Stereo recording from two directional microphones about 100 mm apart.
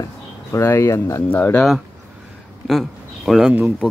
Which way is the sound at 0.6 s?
25° left (ahead or behind).